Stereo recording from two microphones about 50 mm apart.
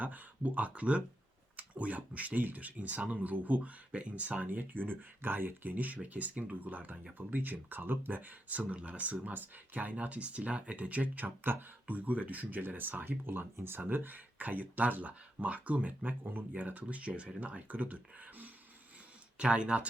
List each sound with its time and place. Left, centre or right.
0.0 s speech: right
16.0 s speech: right
19.4 s speech: right